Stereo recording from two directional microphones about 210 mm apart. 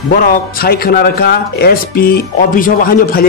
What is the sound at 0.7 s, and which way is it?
Speech, 45° left (ahead or behind).